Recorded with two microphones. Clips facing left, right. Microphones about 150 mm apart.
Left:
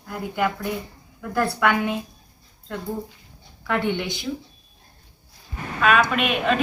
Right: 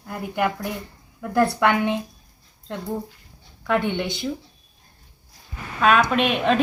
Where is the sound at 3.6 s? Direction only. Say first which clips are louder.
Right 1 dB; 15° right (ahead or behind).